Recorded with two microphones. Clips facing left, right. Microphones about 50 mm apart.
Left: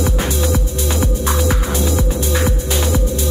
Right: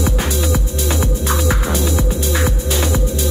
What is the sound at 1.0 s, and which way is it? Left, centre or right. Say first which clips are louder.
Music: left 2 dB; right.